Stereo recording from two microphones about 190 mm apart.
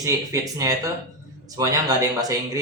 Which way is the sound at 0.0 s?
15° right (ahead or behind).